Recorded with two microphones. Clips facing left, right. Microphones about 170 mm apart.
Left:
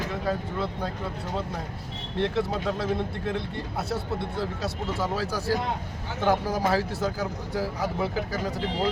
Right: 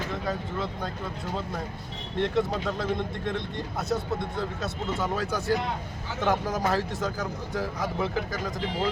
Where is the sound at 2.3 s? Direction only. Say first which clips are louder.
Even; 5° left (ahead or behind).